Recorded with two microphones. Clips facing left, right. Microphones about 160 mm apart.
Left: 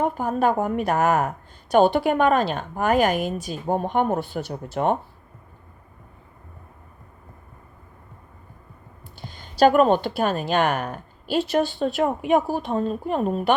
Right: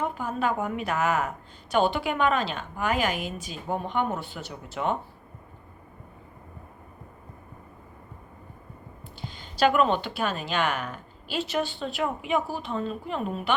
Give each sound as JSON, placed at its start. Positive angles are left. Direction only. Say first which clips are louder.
{"t": 0.0, "sound": "a woman's voice", "louder": "left 6 dB", "side_deg": 45}
{"t": 9.2, "sound": "a woman's voice", "louder": "left 6 dB", "side_deg": 45}